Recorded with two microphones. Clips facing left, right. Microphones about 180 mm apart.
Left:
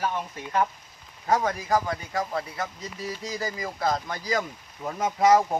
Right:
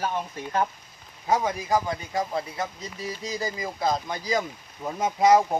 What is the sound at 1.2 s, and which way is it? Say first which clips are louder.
Speech: even; 10° right (ahead or behind).